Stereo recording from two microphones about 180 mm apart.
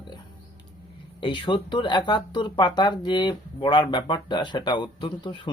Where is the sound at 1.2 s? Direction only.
25° left (ahead or behind).